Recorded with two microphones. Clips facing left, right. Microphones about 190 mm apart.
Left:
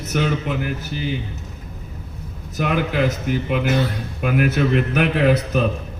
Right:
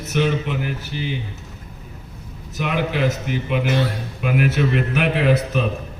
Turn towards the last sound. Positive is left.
turn(degrees=45)  # may be behind; listen again after turning